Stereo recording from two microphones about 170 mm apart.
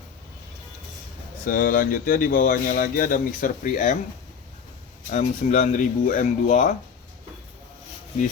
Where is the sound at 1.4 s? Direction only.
55° left (ahead or behind).